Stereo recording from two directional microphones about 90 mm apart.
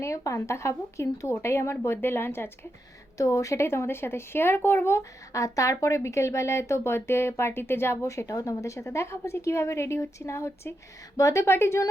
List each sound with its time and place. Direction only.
0.0 s speech: 35° left (ahead or behind)
3.2 s speech: 40° left (ahead or behind)